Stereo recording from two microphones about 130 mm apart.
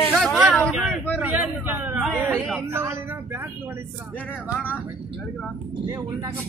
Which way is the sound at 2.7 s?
20° right (ahead or behind).